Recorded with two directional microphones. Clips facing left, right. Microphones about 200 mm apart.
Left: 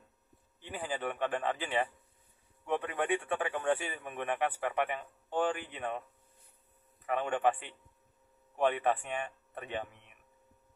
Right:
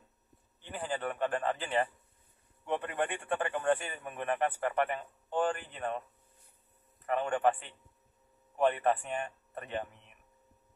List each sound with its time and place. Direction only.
0.6 s a man's voice: 5° left (ahead or behind)
7.1 s a man's voice: centre (ahead or behind)